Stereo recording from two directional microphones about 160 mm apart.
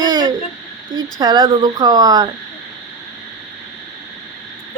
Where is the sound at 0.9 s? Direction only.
25° right (ahead or behind).